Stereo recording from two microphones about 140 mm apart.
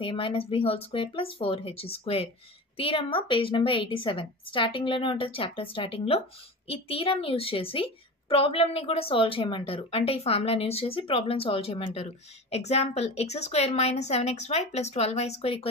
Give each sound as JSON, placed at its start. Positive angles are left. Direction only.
{"t": 0.0, "sound": "a woman's voice", "side_deg": 40}